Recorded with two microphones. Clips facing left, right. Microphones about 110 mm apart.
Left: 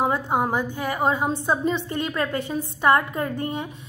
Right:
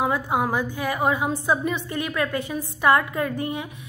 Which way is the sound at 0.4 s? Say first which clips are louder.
Even; 20° left (ahead or behind).